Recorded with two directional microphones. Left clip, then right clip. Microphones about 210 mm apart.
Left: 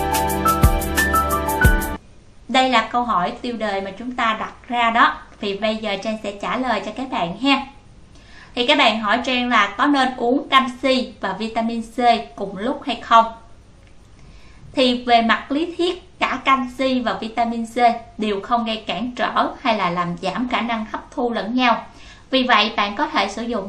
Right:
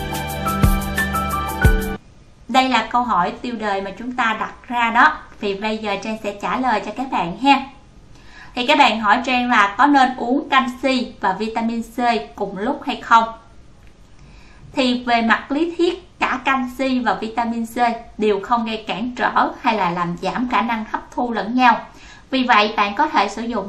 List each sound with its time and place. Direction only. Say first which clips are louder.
0.1 s music: left 4 dB; centre (ahead or behind)
2.5 s a woman's voice: even; 5° right (ahead or behind)
8.5 s a woman's voice: right 1 dB; 5° right (ahead or behind)
14.7 s a woman's voice: left 2 dB; 5° right (ahead or behind)